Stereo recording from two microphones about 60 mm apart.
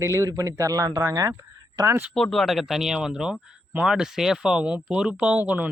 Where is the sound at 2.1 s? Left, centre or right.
Centre.